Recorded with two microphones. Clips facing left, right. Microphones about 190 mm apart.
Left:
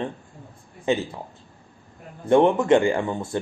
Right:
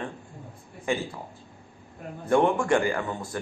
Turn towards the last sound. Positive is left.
turn(degrees=25)  # may be behind; listen again after turning